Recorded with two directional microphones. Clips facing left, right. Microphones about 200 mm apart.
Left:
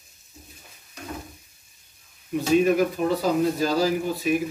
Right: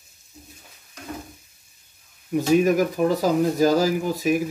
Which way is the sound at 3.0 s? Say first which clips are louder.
Right 3 dB; 60° right (ahead or behind).